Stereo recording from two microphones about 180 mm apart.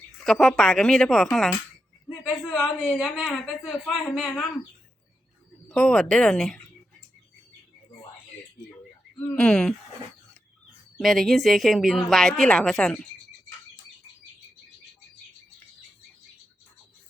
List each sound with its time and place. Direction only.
0.2 s a woman's voice: centre (ahead or behind)
5.6 s a woman's voice: 5° left (ahead or behind)
9.3 s a woman's voice: 5° left (ahead or behind)
10.9 s a woman's voice: centre (ahead or behind)